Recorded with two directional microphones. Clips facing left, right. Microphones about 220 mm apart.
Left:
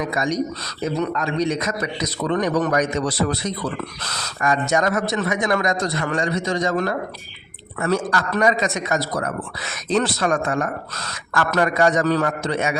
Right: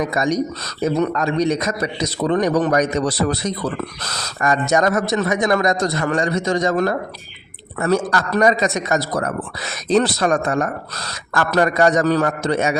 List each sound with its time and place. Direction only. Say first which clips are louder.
0.1 s a man's voice: right 3 dB; 40° right (ahead or behind)